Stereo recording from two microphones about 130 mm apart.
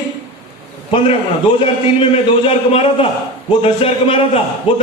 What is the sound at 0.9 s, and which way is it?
A man's voice, 45° left (ahead or behind).